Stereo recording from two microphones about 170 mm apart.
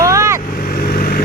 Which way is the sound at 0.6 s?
60° left (ahead or behind).